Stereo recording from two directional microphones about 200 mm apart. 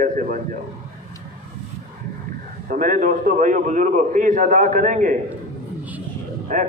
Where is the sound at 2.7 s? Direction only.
40° right (ahead or behind).